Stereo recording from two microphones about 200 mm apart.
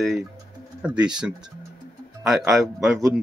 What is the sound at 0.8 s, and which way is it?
Speech, 5° right (ahead or behind).